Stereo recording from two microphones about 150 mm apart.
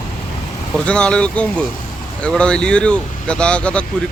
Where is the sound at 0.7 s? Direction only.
5° left (ahead or behind).